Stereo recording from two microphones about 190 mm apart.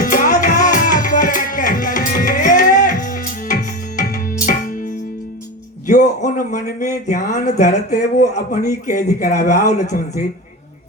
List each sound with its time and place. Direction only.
0.0 s music: 45° left (ahead or behind)
5.9 s speech: 40° left (ahead or behind)